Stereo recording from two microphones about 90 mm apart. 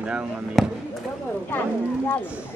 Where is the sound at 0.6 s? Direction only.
Centre (ahead or behind).